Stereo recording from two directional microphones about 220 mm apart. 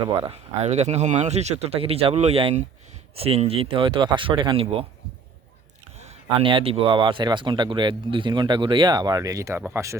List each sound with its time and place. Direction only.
0.0 s speech: 20° right (ahead or behind)
0.6 s speech: 30° right (ahead or behind)
6.1 s speech: 25° right (ahead or behind)